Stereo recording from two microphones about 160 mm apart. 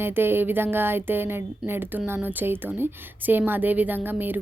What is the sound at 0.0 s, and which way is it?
A woman's voice, 15° right (ahead or behind).